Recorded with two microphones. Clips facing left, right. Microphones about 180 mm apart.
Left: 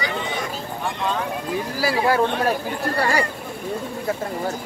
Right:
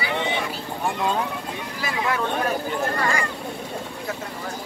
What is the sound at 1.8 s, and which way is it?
Speech, 35° left (ahead or behind).